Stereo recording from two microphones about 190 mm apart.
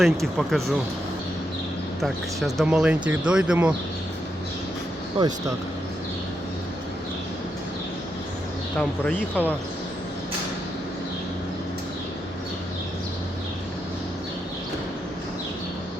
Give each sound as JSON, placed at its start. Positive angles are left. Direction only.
{"t": 0.0, "sound": "speech", "side_deg": 0}
{"t": 2.0, "sound": "speech", "side_deg": 0}
{"t": 5.2, "sound": "speech", "side_deg": -30}
{"t": 8.8, "sound": "speech", "side_deg": 5}